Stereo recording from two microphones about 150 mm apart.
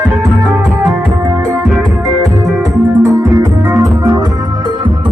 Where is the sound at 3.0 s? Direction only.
20° right (ahead or behind).